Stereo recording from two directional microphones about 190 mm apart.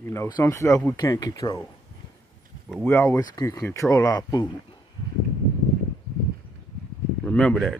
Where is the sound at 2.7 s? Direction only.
10° left (ahead or behind).